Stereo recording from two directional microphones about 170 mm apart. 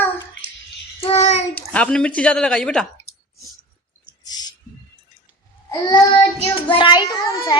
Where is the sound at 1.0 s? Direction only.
40° left (ahead or behind).